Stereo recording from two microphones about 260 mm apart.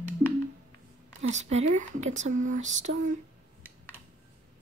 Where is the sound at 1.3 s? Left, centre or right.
Right.